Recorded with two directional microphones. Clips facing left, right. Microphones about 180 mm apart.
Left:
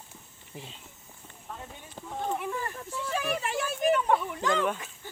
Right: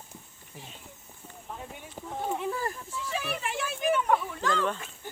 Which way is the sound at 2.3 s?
30° right (ahead or behind).